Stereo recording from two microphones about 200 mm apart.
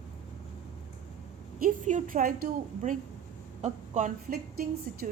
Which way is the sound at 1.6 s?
40° right (ahead or behind).